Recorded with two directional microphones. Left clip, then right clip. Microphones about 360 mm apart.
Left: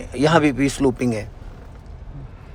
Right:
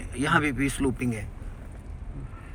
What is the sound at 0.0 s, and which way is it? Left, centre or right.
Speech, centre.